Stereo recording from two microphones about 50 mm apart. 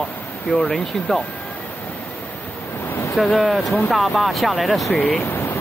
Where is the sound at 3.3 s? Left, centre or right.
Centre.